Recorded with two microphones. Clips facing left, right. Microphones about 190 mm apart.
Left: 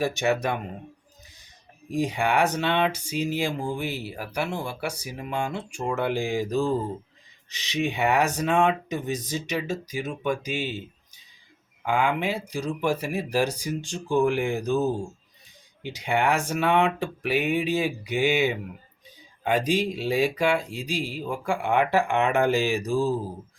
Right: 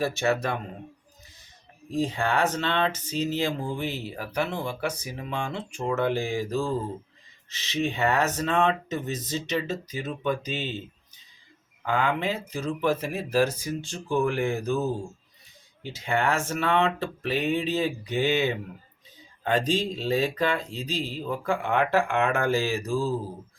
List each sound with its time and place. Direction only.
0.0 s speech: 15° left (ahead or behind)
1.9 s speech: 15° left (ahead or behind)
11.9 s speech: 10° left (ahead or behind)